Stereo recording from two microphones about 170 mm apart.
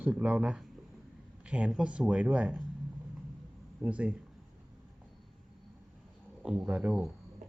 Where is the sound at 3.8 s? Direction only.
5° right (ahead or behind).